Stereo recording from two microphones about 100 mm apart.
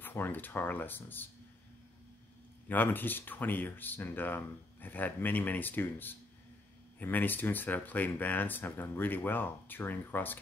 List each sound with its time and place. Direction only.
0.0 s speech: 20° left (ahead or behind)
2.7 s speech: 20° left (ahead or behind)